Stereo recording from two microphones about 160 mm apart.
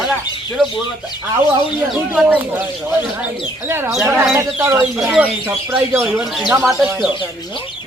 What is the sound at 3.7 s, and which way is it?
Speech, 15° right (ahead or behind).